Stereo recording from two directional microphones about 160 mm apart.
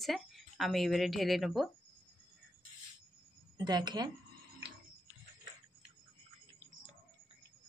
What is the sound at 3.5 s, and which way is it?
Speech, 25° right (ahead or behind).